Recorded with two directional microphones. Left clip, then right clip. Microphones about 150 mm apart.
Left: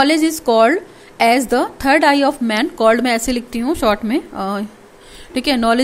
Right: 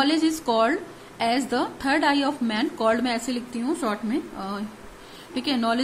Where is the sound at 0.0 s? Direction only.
50° left (ahead or behind).